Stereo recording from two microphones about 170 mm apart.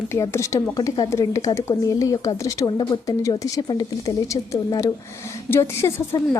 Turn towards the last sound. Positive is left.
turn(degrees=15)  # may be behind; listen again after turning